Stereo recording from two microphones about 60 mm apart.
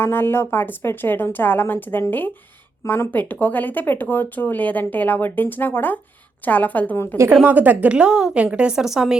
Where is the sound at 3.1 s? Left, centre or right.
Left.